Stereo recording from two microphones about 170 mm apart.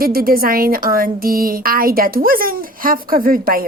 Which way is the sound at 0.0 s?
60° right (ahead or behind).